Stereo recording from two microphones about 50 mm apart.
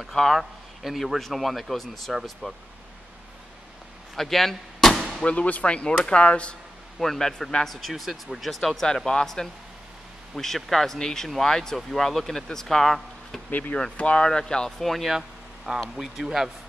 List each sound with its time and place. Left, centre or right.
0.1 s a man's voice: centre
4.1 s door: centre
5.2 s speech: left
7.0 s a man's voice: centre
8.8 s speech: centre
13.5 s speech: left
13.9 s speech: left
14.8 s a man's voice: centre
15.0 s a sound: centre
15.8 s a man's voice: centre